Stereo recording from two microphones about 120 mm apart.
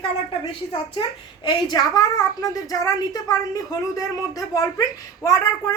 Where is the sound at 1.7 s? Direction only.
30° left (ahead or behind).